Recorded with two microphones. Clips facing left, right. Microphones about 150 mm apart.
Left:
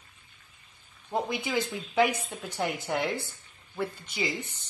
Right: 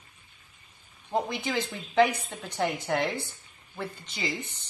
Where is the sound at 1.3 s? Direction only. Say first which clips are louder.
Left 1 dB; 10° left (ahead or behind).